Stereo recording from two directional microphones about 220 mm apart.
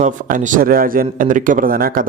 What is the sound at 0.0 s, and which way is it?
A man's voice, 35° right (ahead or behind).